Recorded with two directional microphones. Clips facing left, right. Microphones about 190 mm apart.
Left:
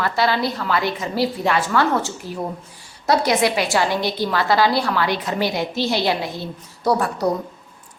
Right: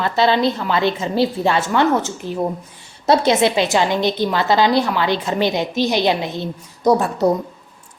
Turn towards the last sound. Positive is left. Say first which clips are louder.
# right 4 dB
turn(degrees=-20)  # may be behind; listen again after turning